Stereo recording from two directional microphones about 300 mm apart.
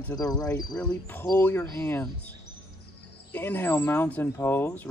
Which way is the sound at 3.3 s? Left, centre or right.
Centre.